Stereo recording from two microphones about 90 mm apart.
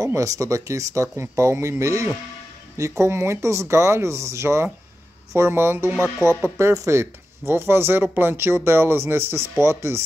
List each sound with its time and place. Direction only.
0.0 s speech: 35° right (ahead or behind)